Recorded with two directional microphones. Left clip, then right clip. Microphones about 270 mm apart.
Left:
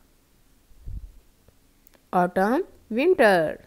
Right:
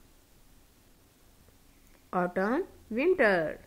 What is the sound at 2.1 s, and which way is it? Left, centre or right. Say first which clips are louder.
Speech: left 8 dB; left.